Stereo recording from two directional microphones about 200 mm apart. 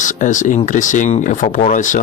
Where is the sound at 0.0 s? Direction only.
40° left (ahead or behind).